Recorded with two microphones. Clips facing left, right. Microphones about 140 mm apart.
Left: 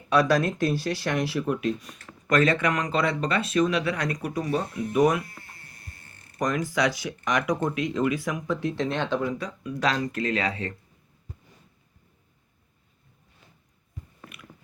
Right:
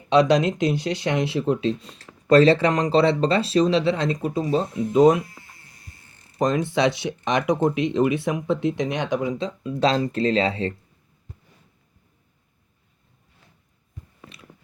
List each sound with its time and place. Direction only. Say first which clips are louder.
0.1 s speech: right 4 dB; 20° right (ahead or behind)
6.4 s speech: right 5 dB; 25° right (ahead or behind)